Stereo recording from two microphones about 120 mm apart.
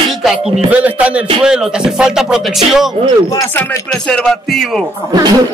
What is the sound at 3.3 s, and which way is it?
Speech, 25° left (ahead or behind).